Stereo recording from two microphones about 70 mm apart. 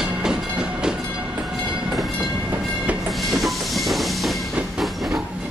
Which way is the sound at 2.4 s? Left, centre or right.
Right.